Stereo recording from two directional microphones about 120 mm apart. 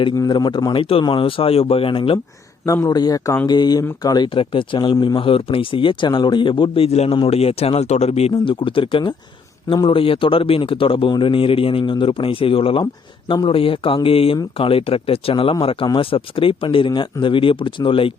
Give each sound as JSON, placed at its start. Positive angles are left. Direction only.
{"t": 0.2, "sound": "a man's voice", "side_deg": 35}
{"t": 2.8, "sound": "a man's voice", "side_deg": 30}
{"t": 4.4, "sound": "speech", "side_deg": 45}
{"t": 8.3, "sound": "speech", "side_deg": 45}